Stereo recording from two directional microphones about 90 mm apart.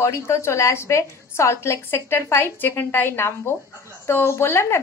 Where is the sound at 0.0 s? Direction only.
30° left (ahead or behind).